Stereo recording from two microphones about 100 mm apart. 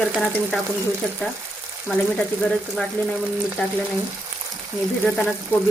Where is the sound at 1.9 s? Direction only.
5° left (ahead or behind).